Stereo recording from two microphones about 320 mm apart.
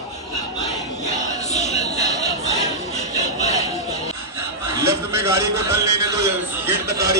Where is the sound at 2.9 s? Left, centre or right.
Left.